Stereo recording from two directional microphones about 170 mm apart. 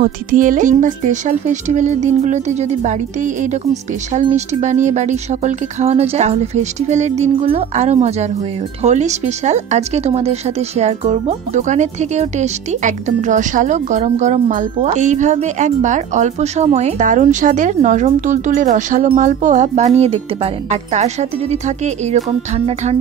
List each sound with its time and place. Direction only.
0.0 s speech: 50° right (ahead or behind)